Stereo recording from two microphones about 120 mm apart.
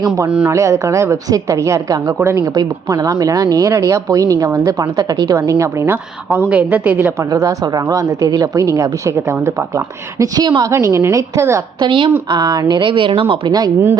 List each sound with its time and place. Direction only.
0.3 s a woman's voice: 10° right (ahead or behind)
0.5 s a woman's voice: 25° right (ahead or behind)
7.3 s a woman's voice: 30° right (ahead or behind)
10.7 s a woman's voice: 25° right (ahead or behind)
11.8 s a woman's voice: 40° right (ahead or behind)